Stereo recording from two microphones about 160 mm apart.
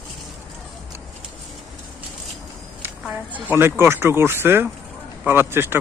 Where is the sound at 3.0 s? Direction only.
10° right (ahead or behind).